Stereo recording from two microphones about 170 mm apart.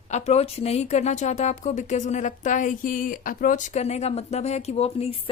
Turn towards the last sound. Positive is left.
turn(degrees=35)  # may be behind; listen again after turning